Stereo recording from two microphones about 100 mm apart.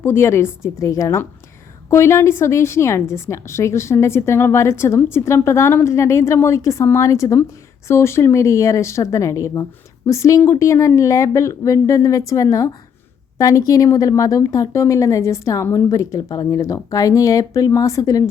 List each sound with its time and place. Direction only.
0.0 s a woman's voice: 25° left (ahead or behind)